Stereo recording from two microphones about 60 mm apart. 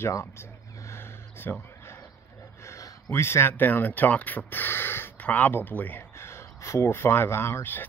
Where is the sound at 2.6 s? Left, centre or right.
Left.